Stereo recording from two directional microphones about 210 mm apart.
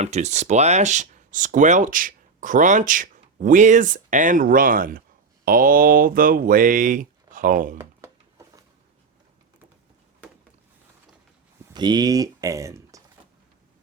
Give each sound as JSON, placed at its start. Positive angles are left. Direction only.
{"t": 0.0, "sound": "speech", "side_deg": -35}
{"t": 7.8, "sound": "a sound", "side_deg": -15}
{"t": 11.7, "sound": "speech", "side_deg": -20}